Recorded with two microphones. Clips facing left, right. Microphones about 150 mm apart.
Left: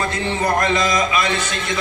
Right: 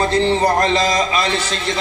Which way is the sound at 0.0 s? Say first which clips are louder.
Right 6 dB; 30° right (ahead or behind).